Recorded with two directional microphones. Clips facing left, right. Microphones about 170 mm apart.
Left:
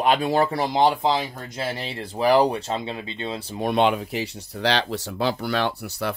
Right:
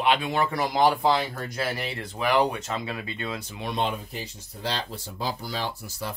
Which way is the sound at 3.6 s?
70° left (ahead or behind).